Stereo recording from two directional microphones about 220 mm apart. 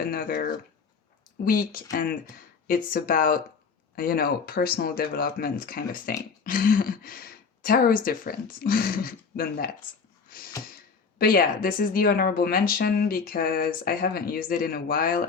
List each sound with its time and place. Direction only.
0.0 s speech: 40° left (ahead or behind)
10.2 s a sound: 40° left (ahead or behind)
11.2 s speech: 40° left (ahead or behind)